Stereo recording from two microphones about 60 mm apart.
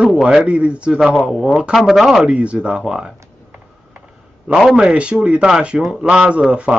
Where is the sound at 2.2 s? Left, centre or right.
Right.